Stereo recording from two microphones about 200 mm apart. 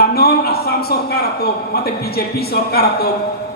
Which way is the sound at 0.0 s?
50° left (ahead or behind).